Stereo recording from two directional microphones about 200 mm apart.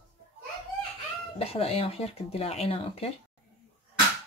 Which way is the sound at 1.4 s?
30° left (ahead or behind).